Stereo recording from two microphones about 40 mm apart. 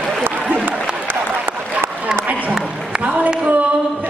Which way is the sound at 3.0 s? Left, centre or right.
Right.